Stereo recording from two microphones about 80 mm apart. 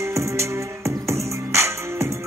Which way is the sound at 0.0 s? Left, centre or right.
Right.